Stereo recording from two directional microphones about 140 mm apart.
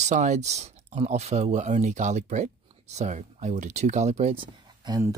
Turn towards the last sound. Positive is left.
turn(degrees=-30)  # may be behind; listen again after turning